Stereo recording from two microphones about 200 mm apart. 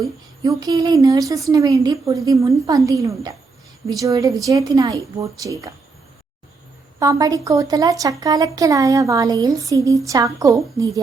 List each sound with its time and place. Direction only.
0.4 s a sound: 20° right (ahead or behind)
1.3 s speech: 15° right (ahead or behind)
7.0 s speech: 15° right (ahead or behind)